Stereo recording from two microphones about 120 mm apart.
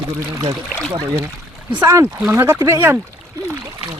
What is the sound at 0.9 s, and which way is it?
Speech, 25° right (ahead or behind).